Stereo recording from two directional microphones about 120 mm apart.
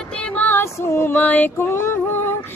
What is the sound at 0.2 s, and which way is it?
Female singing, 10° left (ahead or behind).